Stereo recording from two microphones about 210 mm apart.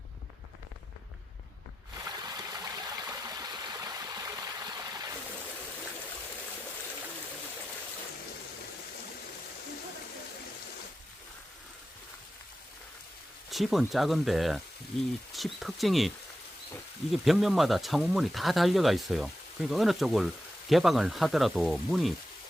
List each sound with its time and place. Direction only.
2.0 s stream: 20° right (ahead or behind)
13.5 s speech: centre (ahead or behind)